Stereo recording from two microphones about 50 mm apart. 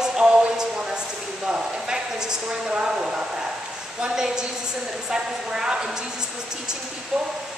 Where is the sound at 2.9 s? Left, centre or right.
Centre.